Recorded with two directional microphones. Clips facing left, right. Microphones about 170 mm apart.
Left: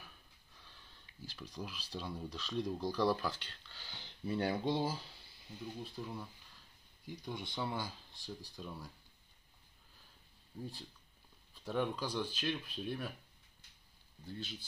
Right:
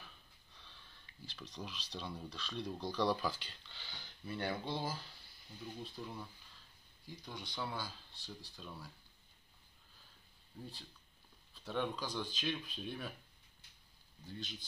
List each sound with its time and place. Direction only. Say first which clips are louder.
0.0 s speech: even; 10° left (ahead or behind)
5.8 s speech: left 2 dB; 5° left (ahead or behind)
7.1 s speech: left 5 dB; 25° left (ahead or behind)
10.5 s speech: left 4 dB; 10° left (ahead or behind)
14.2 s speech: left 2 dB; 10° left (ahead or behind)